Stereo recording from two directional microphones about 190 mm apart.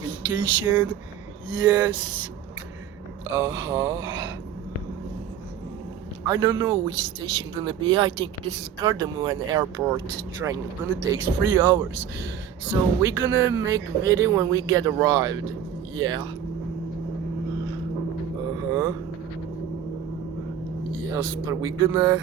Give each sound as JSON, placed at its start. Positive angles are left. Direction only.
{"t": 0.0, "sound": "a sound", "side_deg": -20}
{"t": 1.5, "sound": "speech", "side_deg": -20}
{"t": 3.3, "sound": "speech", "side_deg": -15}
{"t": 6.2, "sound": "speech", "side_deg": -20}
{"t": 18.7, "sound": "vehicle", "side_deg": -20}
{"t": 21.1, "sound": "speech", "side_deg": -15}